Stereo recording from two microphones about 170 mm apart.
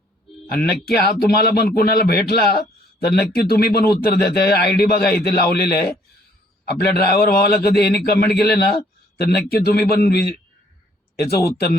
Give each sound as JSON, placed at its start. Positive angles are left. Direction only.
{"t": 0.4, "sound": "speech", "side_deg": 65}